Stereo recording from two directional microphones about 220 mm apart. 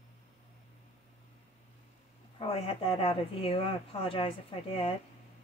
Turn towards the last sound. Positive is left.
turn(degrees=25)  # may be behind; listen again after turning